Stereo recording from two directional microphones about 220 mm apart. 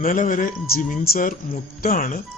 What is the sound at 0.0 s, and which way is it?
Speech, 35° left (ahead or behind).